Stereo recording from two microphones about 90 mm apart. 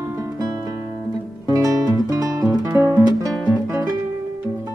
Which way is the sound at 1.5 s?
40° right (ahead or behind).